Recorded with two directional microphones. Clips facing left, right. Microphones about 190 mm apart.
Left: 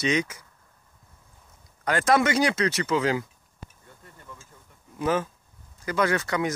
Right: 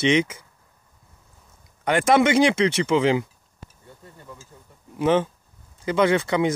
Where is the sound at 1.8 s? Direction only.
20° right (ahead or behind).